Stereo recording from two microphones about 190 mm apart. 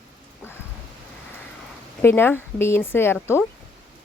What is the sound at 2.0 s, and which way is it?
Speech, 10° left (ahead or behind).